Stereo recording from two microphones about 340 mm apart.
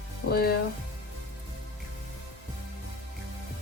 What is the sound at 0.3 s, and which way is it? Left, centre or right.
Speech, left.